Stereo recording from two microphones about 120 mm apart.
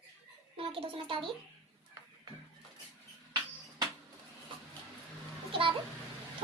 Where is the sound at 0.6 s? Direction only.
45° right (ahead or behind).